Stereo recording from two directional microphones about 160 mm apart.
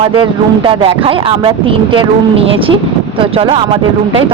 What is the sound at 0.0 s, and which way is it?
Speech, 30° right (ahead or behind).